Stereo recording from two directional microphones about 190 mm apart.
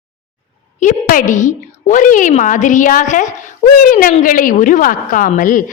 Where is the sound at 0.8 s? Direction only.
40° left (ahead or behind).